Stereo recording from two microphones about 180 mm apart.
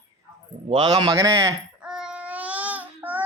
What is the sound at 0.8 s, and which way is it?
Speech, 25° right (ahead or behind).